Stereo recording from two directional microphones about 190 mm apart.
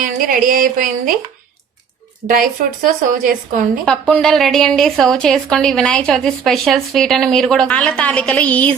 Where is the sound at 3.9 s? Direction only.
5° left (ahead or behind).